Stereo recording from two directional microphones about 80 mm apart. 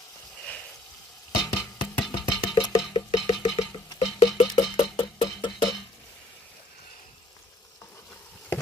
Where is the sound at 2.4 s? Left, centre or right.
Left.